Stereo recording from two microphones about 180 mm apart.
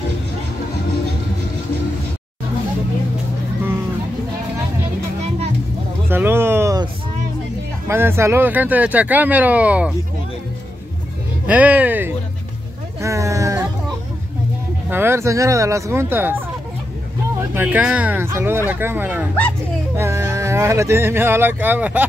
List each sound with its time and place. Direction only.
6.0 s a sound: 10° right (ahead or behind)
7.9 s speech: 15° right (ahead or behind)
11.4 s speech: 10° right (ahead or behind)
13.0 s a sound: 15° right (ahead or behind)
14.9 s speech: 10° right (ahead or behind)
17.4 s speech: 10° right (ahead or behind)